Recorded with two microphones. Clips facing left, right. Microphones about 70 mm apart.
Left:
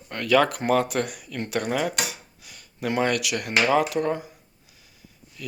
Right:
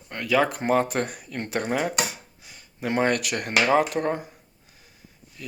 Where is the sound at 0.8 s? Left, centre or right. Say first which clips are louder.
Even; right.